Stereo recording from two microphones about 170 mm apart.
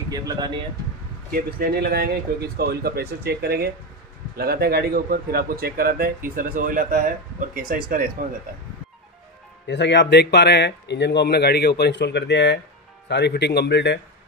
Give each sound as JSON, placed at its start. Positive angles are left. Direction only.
{"t": 0.1, "sound": "speech", "side_deg": -20}
{"t": 1.3, "sound": "speech", "side_deg": -65}
{"t": 9.7, "sound": "speech", "side_deg": 90}